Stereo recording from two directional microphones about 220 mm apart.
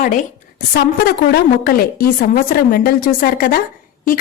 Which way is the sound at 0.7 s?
45° left (ahead or behind).